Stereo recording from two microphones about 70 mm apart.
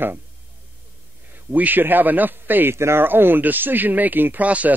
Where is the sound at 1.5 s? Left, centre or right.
Right.